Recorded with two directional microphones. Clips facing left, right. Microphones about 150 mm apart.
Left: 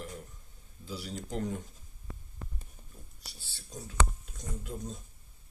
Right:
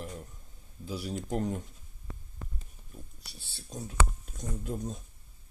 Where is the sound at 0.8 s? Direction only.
45° right (ahead or behind).